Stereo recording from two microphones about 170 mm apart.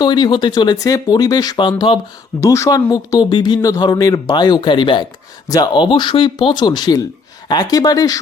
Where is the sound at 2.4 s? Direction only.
15° left (ahead or behind).